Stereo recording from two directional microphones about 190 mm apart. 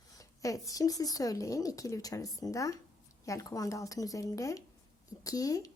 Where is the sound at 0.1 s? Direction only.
20° left (ahead or behind).